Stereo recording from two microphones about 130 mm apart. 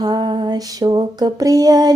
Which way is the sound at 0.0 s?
35° right (ahead or behind).